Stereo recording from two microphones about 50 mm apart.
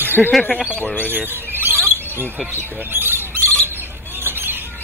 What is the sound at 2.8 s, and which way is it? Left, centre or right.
Squawk, right.